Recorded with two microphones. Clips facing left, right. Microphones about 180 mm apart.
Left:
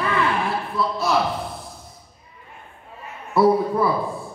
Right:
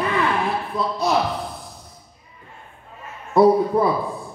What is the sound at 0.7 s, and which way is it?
Speech, 20° right (ahead or behind).